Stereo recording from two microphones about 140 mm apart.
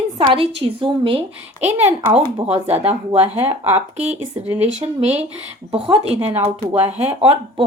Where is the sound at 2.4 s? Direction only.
45° right (ahead or behind).